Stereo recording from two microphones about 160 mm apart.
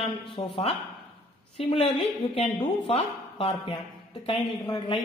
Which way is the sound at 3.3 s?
35° left (ahead or behind).